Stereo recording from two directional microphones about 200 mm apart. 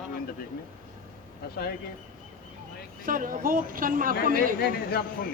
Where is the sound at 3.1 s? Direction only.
45° right (ahead or behind).